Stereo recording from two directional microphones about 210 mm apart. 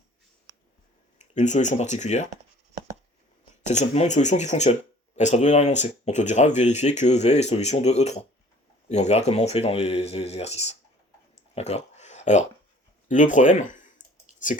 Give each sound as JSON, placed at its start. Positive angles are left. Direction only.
{"t": 1.2, "sound": "speech", "side_deg": 35}
{"t": 3.7, "sound": "speech", "side_deg": 35}
{"t": 11.5, "sound": "a sound", "side_deg": 30}
{"t": 13.1, "sound": "speech", "side_deg": 35}